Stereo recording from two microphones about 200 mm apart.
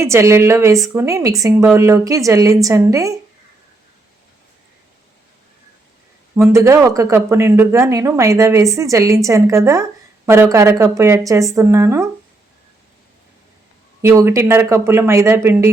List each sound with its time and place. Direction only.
0.0 s speech: 15° right (ahead or behind)
6.3 s speech: 10° right (ahead or behind)
14.0 s speech: 15° right (ahead or behind)